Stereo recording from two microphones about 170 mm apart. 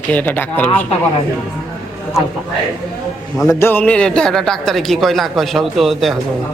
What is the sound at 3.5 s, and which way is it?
A man's voice, 15° left (ahead or behind).